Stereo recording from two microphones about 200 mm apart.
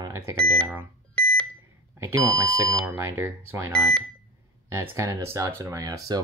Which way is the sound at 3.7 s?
5° left (ahead or behind).